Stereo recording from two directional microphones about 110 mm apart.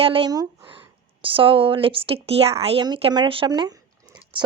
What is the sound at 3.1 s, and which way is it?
Speech, 45° right (ahead or behind).